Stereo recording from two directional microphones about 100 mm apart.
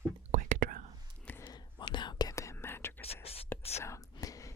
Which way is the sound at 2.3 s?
30° left (ahead or behind).